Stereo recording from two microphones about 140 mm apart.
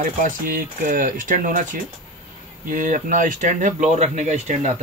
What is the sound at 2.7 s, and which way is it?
Speech, 65° right (ahead or behind).